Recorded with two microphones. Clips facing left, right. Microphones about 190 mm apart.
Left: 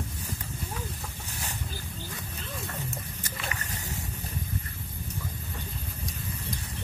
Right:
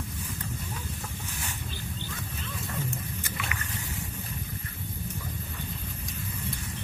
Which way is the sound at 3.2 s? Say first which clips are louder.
Right 1 dB; 40° left (ahead or behind).